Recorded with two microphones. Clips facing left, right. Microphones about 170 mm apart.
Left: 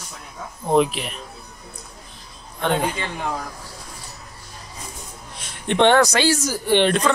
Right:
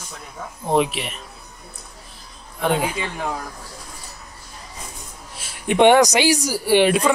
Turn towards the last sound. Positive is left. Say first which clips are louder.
# right 2 dB
turn(degrees=-10)  # may be behind; listen again after turning